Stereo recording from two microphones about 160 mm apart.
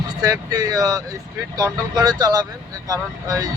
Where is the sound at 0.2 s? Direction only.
20° right (ahead or behind).